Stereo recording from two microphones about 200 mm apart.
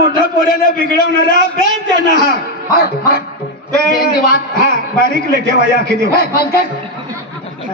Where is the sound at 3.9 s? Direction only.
50° left (ahead or behind).